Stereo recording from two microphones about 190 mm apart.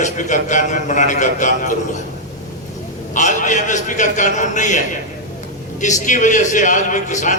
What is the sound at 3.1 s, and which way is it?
A man's voice, 40° left (ahead or behind).